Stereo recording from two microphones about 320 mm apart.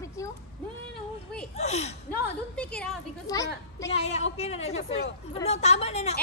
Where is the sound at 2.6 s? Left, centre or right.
Centre.